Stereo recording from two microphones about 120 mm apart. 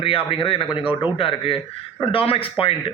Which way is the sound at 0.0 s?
50° left (ahead or behind).